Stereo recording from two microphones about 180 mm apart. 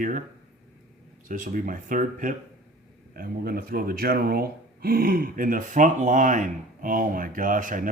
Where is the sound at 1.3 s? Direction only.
50° right (ahead or behind).